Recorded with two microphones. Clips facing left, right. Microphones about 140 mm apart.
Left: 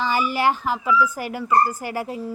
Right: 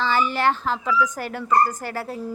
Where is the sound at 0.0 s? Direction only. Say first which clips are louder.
Even; 10° left (ahead or behind).